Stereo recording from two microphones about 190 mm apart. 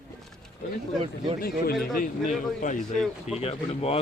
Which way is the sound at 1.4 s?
50° left (ahead or behind).